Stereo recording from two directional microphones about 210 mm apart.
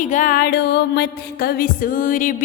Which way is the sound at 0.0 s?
40° left (ahead or behind).